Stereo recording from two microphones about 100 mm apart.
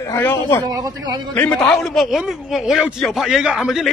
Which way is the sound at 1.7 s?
Centre (ahead or behind).